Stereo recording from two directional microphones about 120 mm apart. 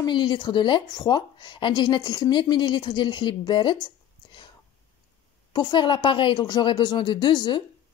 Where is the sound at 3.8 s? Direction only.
40° left (ahead or behind).